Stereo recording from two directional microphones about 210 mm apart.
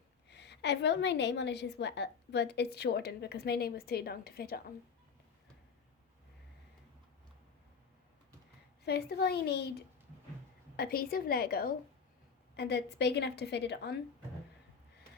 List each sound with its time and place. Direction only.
0.3 s a woman's voice: 55° left (ahead or behind)
8.8 s a woman's voice: 50° left (ahead or behind)